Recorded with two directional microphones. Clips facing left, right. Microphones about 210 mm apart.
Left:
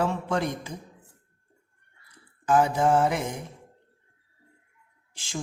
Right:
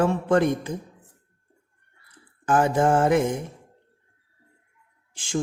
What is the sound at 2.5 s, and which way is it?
Speech, 50° right (ahead or behind).